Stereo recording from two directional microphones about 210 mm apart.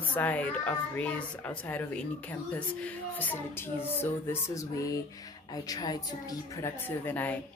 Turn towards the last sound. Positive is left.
turn(degrees=10)  # may be behind; listen again after turning